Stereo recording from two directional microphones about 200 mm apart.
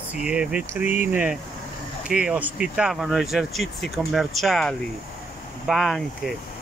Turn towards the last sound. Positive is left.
turn(degrees=0)  # may be behind; listen again after turning